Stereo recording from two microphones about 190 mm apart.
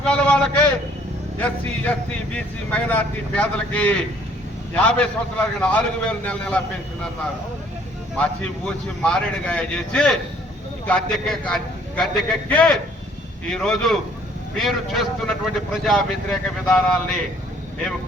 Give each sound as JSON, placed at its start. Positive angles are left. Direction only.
{"t": 0.0, "sound": "speech", "side_deg": 5}
{"t": 8.2, "sound": "speech", "side_deg": 5}